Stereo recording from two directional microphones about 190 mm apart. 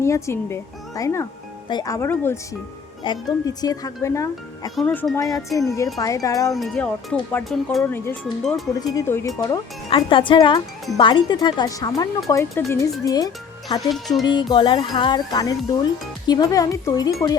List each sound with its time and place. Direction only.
0.0 s speech: 15° left (ahead or behind)
4.7 s speech: 5° left (ahead or behind)
6.5 s speech: centre (ahead or behind); by 13.9 s 20° left (ahead or behind)
13.9 s speech: centre (ahead or behind)
14.3 s speech: 25° left (ahead or behind)